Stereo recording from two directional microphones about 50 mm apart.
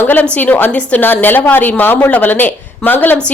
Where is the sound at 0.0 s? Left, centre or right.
Left.